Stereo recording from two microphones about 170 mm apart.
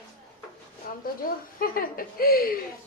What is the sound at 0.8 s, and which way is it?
A woman's voice, 55° left (ahead or behind).